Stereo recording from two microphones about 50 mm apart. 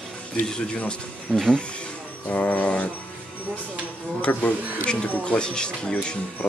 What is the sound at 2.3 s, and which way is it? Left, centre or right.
Music, left.